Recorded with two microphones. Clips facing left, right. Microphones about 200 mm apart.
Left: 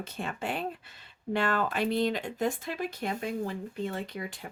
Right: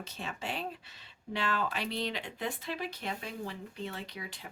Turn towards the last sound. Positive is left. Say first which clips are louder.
# left 6 dB
turn(degrees=50)  # may be behind; listen again after turning